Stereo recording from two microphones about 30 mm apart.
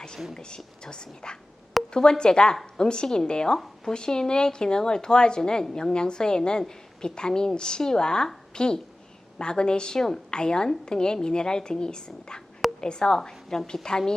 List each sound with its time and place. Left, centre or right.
0.3 s a woman's voice: left